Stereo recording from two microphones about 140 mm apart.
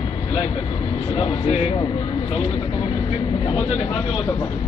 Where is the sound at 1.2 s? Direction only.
50° left (ahead or behind).